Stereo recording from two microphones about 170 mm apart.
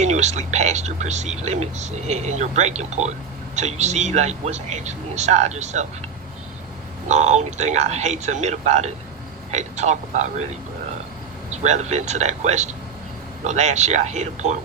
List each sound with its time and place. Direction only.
0.0 s speech: 40° right (ahead or behind)
7.1 s speech: 45° right (ahead or behind)